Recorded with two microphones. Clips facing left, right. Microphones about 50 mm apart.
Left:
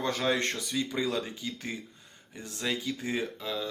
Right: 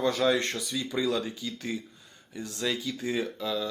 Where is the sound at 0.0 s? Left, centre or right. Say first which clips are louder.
Right 3 dB; left.